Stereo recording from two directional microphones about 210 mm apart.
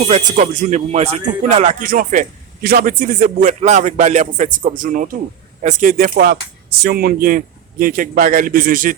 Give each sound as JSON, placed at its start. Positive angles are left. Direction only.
{"t": 0.1, "sound": "speech", "side_deg": -35}